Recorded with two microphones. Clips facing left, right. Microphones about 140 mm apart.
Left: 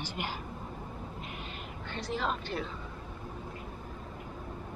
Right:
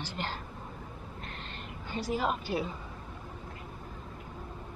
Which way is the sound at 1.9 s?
10° right (ahead or behind).